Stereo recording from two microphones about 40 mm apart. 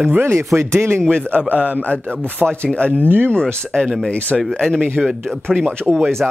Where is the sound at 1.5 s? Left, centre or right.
Right.